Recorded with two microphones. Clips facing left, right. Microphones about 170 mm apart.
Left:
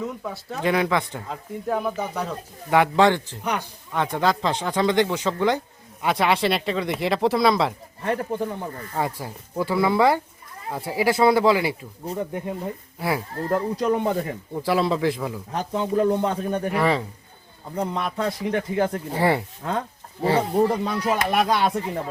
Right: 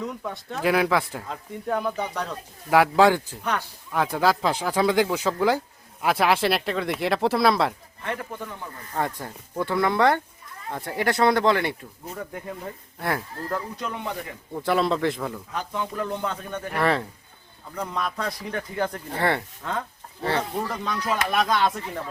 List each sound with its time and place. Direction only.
0.0 s speech: 5° left (ahead or behind)
8.0 s speech: 35° left (ahead or behind)
9.0 s speech: 5° left (ahead or behind)
12.0 s speech: 25° left (ahead or behind)
13.0 s speech: 5° left (ahead or behind)
13.5 s speech: 35° left (ahead or behind)
14.5 s speech: centre (ahead or behind)
15.5 s speech: 25° left (ahead or behind)
16.7 s speech: centre (ahead or behind)
17.7 s speech: 30° left (ahead or behind)
19.1 s speech: 10° left (ahead or behind)
20.6 s speech: 30° left (ahead or behind)